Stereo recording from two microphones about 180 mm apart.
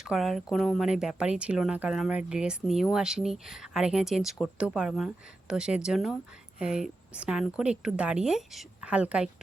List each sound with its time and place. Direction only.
0.0 s speech: centre (ahead or behind)